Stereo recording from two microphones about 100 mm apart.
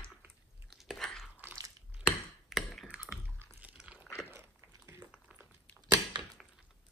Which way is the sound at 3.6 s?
15° right (ahead or behind).